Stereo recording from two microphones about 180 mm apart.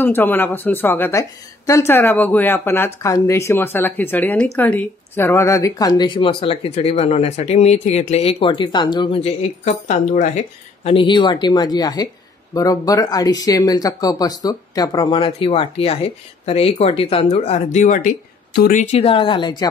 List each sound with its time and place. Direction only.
0.0 s speech: 10° left (ahead or behind)
9.2 s speech: 40° left (ahead or behind)
18.8 s speech: 35° left (ahead or behind)